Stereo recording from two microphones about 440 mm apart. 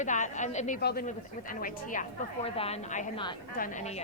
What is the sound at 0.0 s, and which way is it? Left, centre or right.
Speech, centre.